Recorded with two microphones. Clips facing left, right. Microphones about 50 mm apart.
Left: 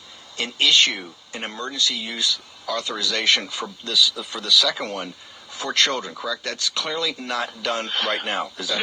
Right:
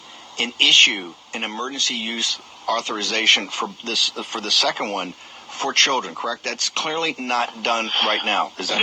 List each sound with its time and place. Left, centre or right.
0.3 s speech: right